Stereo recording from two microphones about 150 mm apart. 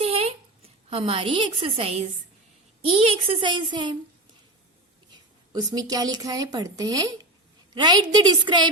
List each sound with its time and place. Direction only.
0.0 s a sound: 40° right (ahead or behind)
0.9 s a woman's voice: 35° right (ahead or behind)
5.5 s a woman's voice: 25° right (ahead or behind)